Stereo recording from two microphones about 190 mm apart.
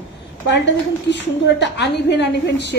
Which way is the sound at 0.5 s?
65° left (ahead or behind).